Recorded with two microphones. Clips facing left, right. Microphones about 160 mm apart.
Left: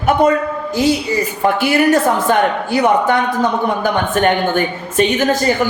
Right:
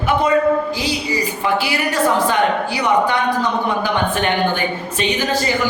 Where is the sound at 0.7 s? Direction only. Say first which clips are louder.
Left 6 dB; 50° left (ahead or behind).